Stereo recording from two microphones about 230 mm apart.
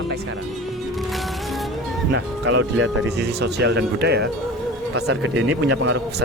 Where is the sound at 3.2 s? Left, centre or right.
Right.